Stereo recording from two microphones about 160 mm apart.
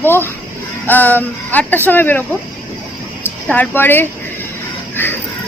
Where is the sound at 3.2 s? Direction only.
10° left (ahead or behind).